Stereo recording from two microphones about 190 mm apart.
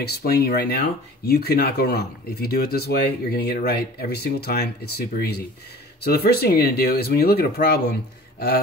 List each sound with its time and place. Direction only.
0.0 s speech: 55° left (ahead or behind)